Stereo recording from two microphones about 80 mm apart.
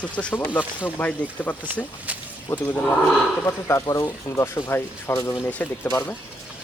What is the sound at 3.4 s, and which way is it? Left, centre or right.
Speech, left.